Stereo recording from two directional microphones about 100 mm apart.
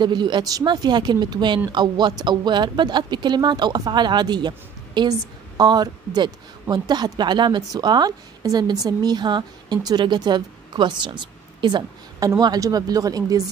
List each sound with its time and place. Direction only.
0.0 s speech: 50° right (ahead or behind)